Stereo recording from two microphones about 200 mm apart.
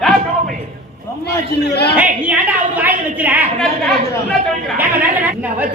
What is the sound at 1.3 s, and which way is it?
Speech, 55° left (ahead or behind).